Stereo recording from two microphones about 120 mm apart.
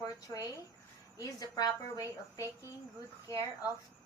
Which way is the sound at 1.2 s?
30° left (ahead or behind).